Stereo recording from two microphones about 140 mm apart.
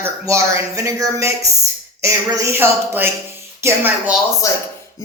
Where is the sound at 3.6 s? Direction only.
15° right (ahead or behind).